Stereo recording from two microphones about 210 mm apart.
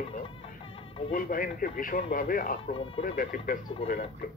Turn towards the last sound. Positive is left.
turn(degrees=40)  # may be behind; listen again after turning